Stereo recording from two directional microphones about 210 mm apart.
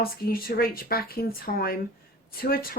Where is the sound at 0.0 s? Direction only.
45° left (ahead or behind).